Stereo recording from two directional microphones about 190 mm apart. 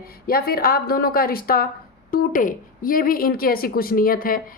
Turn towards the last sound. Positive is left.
turn(degrees=50)  # may be behind; listen again after turning